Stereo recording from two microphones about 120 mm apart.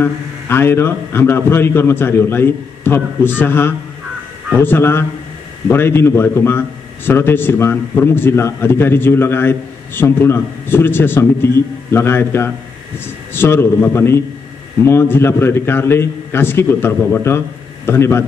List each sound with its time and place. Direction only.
0.0 s a man's voice: 20° left (ahead or behind)